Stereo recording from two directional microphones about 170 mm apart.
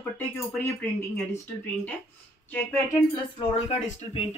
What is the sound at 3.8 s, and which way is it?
Speech, 40° left (ahead or behind).